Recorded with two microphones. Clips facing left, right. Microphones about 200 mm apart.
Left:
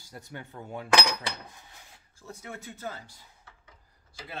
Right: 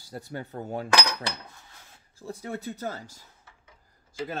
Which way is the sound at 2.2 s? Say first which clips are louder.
Right 7 dB; 35° right (ahead or behind).